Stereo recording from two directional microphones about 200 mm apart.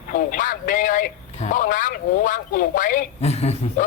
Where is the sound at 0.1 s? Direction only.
40° left (ahead or behind).